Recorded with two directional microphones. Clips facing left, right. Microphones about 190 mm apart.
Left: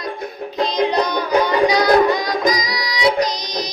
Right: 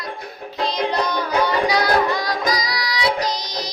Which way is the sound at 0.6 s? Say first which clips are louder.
Left 4 dB; 15° left (ahead or behind).